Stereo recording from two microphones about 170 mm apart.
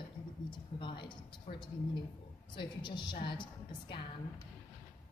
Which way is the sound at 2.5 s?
30° left (ahead or behind).